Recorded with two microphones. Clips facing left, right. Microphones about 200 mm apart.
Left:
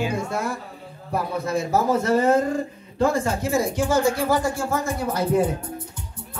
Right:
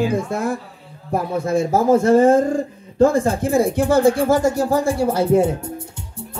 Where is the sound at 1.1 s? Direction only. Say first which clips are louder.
Right 5 dB; 50° right (ahead or behind); by 5.7 s 25° right (ahead or behind).